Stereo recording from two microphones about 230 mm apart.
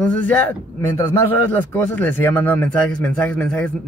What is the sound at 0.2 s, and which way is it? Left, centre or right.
Speech, centre.